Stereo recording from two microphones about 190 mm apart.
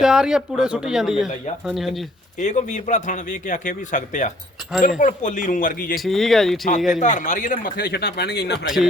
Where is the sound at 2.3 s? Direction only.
40° left (ahead or behind).